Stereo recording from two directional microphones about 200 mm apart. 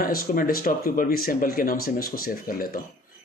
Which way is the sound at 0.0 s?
45° left (ahead or behind).